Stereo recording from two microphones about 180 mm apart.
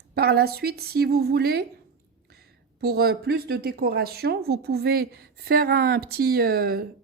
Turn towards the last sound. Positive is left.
turn(degrees=-55)  # may be behind; listen again after turning